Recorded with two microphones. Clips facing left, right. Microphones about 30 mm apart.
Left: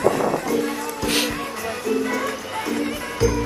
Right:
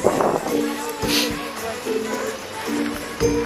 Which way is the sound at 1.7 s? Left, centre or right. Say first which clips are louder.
Left 2 dB; left.